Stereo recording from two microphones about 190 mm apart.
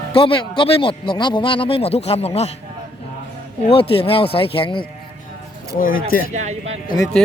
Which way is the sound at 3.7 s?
30° left (ahead or behind).